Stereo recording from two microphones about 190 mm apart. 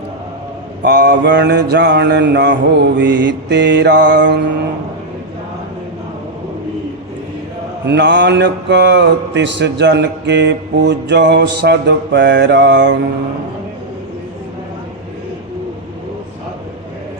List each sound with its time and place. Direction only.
0.8 s mantra: 60° right (ahead or behind)
7.9 s mantra: 65° right (ahead or behind)